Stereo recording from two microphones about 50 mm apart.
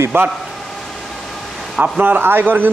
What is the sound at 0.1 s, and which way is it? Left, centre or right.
Speech, right.